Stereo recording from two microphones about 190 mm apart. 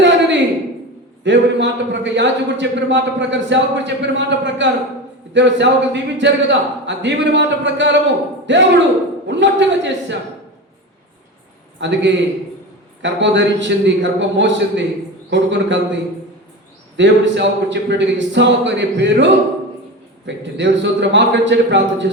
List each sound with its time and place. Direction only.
0.0 s a sound: 70° right (ahead or behind)
1.2 s a man's voice: 70° right (ahead or behind)
11.8 s a man's voice: 70° right (ahead or behind)
17.0 s a man's voice: 70° right (ahead or behind)